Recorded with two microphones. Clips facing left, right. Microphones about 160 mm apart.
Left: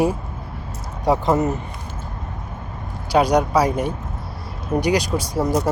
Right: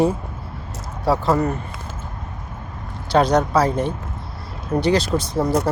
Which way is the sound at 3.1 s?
10° left (ahead or behind).